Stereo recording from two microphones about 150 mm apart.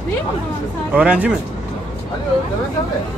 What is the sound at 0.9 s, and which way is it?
Speech, 10° right (ahead or behind).